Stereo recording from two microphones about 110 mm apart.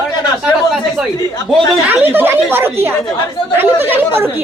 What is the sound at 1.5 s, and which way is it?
Speech, centre (ahead or behind).